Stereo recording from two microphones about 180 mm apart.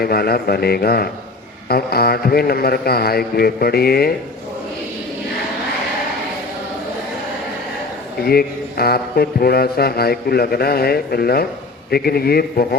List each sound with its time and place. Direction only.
0.0 s a man's voice: 60° left (ahead or behind)
8.2 s a man's voice: 60° left (ahead or behind)